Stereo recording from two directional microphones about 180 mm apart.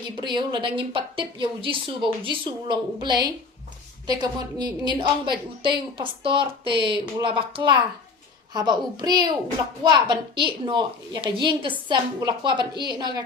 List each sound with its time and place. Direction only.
0.2 s a woman's voice: 25° right (ahead or behind)